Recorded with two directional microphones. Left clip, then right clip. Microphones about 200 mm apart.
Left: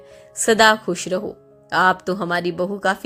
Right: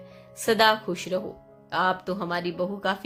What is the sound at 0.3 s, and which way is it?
A woman's voice, 35° left (ahead or behind).